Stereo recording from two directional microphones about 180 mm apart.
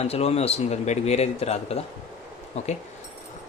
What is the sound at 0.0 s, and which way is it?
Speech, 35° left (ahead or behind).